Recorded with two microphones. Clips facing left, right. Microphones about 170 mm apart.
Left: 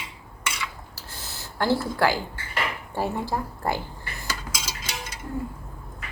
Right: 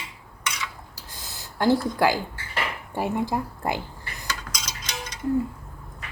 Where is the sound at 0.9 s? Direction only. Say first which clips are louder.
Left 2 dB; 15° right (ahead or behind).